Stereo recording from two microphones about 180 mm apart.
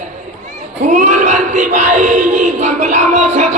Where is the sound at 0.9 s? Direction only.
45° right (ahead or behind).